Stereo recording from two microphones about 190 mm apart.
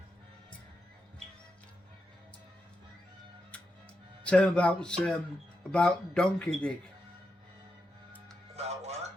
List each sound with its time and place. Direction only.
3.5 s music: 5° left (ahead or behind)
4.2 s speech: 5° left (ahead or behind)
8.5 s music: 35° right (ahead or behind)